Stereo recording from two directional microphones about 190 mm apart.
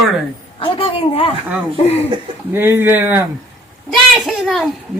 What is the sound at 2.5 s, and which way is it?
A child's voice, 10° right (ahead or behind).